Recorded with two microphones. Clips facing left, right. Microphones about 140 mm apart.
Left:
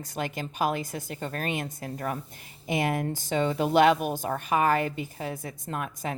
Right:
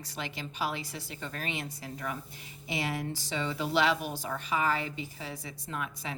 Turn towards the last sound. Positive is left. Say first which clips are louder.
# left 5 dB
turn(degrees=50)  # may be behind; listen again after turning